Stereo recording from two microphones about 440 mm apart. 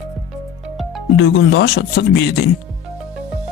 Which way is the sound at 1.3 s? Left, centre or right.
Left.